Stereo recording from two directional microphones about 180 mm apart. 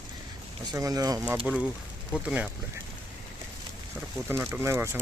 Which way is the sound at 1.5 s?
5° right (ahead or behind).